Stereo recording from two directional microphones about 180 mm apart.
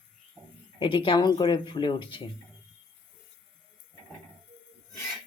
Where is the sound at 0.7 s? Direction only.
25° left (ahead or behind).